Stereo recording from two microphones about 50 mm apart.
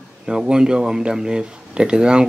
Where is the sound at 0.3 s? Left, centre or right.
Centre.